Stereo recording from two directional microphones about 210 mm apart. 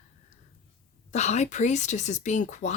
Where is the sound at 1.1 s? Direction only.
35° left (ahead or behind).